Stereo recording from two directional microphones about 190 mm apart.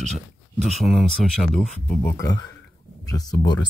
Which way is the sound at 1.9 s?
10° left (ahead or behind).